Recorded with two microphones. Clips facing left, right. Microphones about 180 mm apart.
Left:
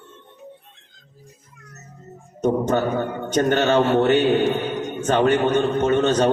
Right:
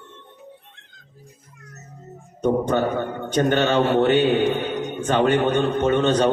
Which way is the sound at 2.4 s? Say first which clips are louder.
Even; 45° left (ahead or behind).